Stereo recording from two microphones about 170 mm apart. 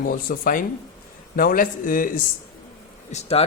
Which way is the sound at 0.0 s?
55° left (ahead or behind).